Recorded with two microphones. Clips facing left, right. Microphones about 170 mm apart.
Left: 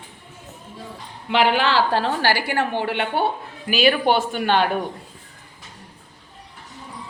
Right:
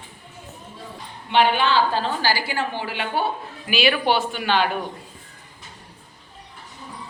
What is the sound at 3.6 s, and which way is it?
Speech, 40° left (ahead or behind).